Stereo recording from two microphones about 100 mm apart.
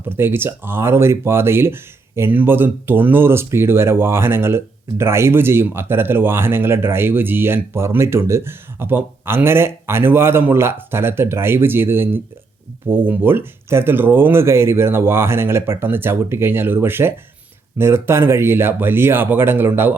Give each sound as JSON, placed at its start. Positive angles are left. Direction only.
{"t": 0.1, "sound": "speech", "side_deg": -25}